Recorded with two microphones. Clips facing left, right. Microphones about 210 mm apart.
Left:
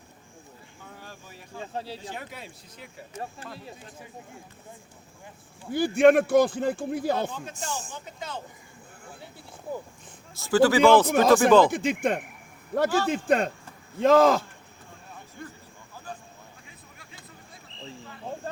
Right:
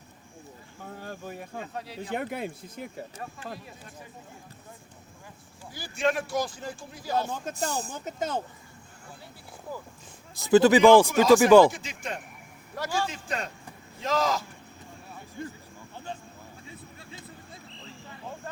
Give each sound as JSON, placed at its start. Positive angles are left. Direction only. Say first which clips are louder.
{"t": 0.9, "sound": "a sound", "louder": "right 10 dB", "side_deg": -50}
{"t": 1.6, "sound": "speech", "louder": "left 4 dB", "side_deg": 30}
{"t": 2.0, "sound": "speech", "louder": "right 8 dB", "side_deg": -55}
{"t": 3.2, "sound": "speech", "louder": "left 1 dB", "side_deg": 30}
{"t": 5.7, "sound": "a man's voice", "louder": "left 10 dB", "side_deg": 55}
{"t": 7.3, "sound": "speech", "louder": "right 4 dB", "side_deg": -45}
{"t": 9.7, "sound": "speech", "louder": "left 4 dB", "side_deg": 25}
{"t": 10.3, "sound": "a man's voice", "louder": "right 2 dB", "side_deg": -20}
{"t": 11.1, "sound": "a man's voice", "louder": "right 1 dB", "side_deg": 55}
{"t": 11.3, "sound": "a man's voice", "louder": "right 3 dB", "side_deg": -10}
{"t": 11.7, "sound": "a man's voice", "louder": "left 12 dB", "side_deg": 55}
{"t": 16.6, "sound": "vehicle", "louder": "right 6 dB", "side_deg": -30}
{"t": 18.3, "sound": "vehicle", "louder": "left 5 dB", "side_deg": 30}